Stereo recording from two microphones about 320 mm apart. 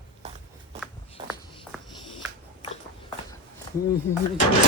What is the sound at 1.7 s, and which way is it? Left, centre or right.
Music, centre.